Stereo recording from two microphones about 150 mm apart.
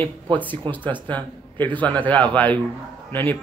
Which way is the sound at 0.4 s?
10° left (ahead or behind).